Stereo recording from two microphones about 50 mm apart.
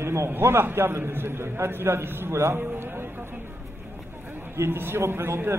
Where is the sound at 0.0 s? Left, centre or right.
Right.